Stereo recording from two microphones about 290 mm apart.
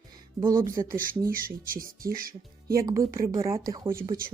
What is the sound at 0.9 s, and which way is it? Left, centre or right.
Speech, right.